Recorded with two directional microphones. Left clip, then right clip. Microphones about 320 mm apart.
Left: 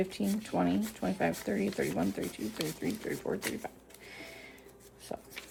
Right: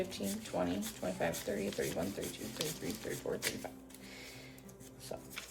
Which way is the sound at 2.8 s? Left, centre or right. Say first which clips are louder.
Left 6 dB; left.